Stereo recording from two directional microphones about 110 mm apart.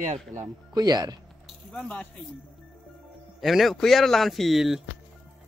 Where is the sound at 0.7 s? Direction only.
35° right (ahead or behind).